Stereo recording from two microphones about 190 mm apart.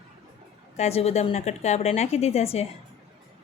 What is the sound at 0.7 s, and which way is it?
A woman's voice, 35° left (ahead or behind).